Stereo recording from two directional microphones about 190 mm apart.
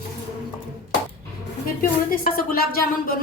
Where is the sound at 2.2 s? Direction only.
50° left (ahead or behind).